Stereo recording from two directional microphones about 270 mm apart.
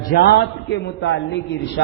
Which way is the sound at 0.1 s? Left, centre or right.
Left.